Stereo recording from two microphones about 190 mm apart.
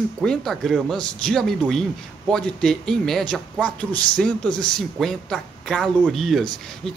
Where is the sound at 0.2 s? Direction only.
5° left (ahead or behind).